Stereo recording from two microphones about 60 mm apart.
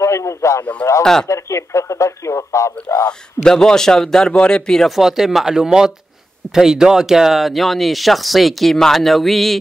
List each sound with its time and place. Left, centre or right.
0.0 s speech: left
3.1 s a man's voice: centre
4.8 s speech: centre